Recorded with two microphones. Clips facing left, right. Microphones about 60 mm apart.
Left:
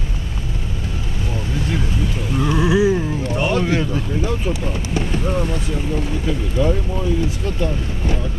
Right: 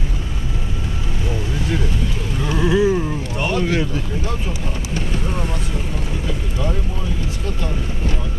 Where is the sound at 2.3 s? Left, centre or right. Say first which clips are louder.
Left 1 dB; centre.